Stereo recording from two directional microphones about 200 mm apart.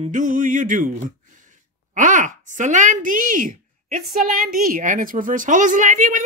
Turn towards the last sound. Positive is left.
turn(degrees=-40)  # may be behind; listen again after turning